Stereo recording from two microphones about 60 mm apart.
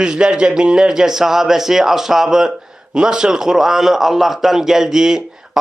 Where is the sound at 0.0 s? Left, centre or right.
Centre.